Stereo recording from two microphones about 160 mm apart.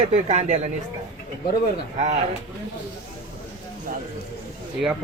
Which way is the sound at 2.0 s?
45° right (ahead or behind).